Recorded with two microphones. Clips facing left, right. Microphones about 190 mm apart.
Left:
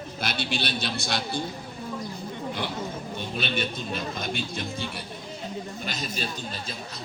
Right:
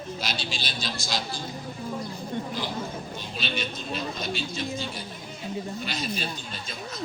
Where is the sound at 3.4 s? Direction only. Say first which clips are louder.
Left 2 dB; 55° left (ahead or behind).